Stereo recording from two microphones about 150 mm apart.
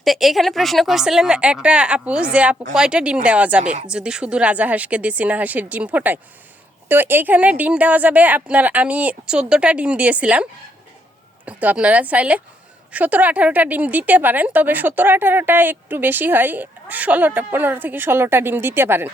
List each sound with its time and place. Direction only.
0.0 s a woman's voice: centre (ahead or behind)
3.6 s speech: 50° right (ahead or behind)
3.8 s speech: 5° right (ahead or behind)